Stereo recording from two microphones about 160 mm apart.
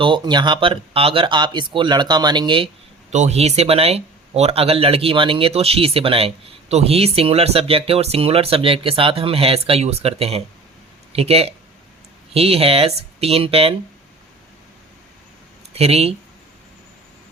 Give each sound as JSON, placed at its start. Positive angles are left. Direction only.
{"t": 0.0, "sound": "speech", "side_deg": -30}
{"t": 3.1, "sound": "speech", "side_deg": -45}
{"t": 15.7, "sound": "speech", "side_deg": -40}